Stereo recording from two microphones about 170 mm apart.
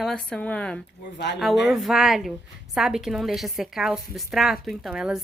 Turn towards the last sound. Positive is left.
turn(degrees=-5)  # may be behind; listen again after turning